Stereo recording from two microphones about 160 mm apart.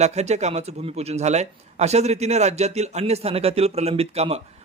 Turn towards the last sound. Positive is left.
turn(degrees=-40)  # may be behind; listen again after turning